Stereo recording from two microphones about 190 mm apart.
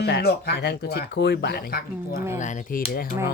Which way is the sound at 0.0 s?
55° left (ahead or behind).